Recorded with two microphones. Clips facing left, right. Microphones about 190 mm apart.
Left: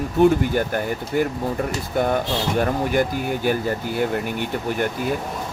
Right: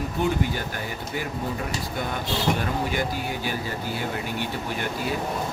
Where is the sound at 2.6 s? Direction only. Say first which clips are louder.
Left 7 dB; 50° left (ahead or behind).